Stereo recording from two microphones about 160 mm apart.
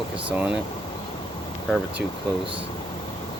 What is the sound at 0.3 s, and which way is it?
Speech, 10° right (ahead or behind).